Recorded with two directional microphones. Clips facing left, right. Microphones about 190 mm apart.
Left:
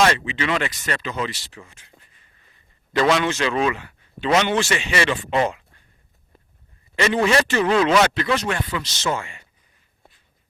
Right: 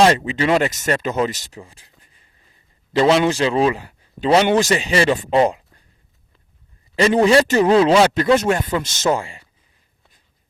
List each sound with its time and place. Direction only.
0.0 s a man's voice: 40° right (ahead or behind)
3.0 s a man's voice: 30° right (ahead or behind)
6.9 s a man's voice: 35° right (ahead or behind)